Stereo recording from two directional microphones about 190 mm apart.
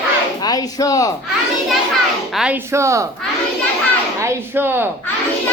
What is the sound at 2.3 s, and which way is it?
Speech, 5° right (ahead or behind).